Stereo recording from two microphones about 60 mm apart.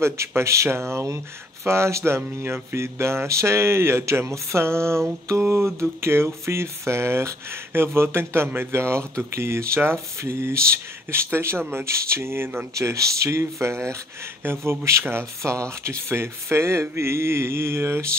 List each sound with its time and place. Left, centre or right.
0.0 s speech: right
12.7 s speech: right